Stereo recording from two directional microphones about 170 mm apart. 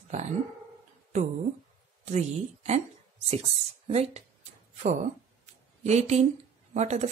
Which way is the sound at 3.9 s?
35° right (ahead or behind).